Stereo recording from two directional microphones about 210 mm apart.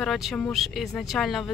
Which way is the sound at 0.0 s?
Centre (ahead or behind).